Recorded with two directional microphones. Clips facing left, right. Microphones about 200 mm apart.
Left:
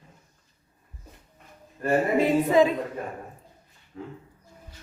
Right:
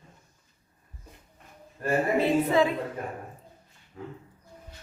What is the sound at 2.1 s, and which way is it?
Speech, 15° left (ahead or behind).